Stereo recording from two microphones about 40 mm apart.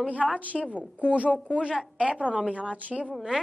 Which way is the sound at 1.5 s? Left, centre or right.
Left.